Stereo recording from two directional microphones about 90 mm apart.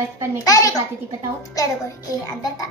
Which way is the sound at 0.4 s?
40° left (ahead or behind).